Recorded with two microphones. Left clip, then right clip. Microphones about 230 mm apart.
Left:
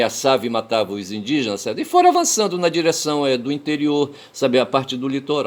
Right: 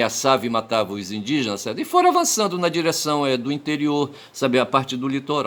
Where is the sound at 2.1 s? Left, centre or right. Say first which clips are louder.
Left 2 dB; right.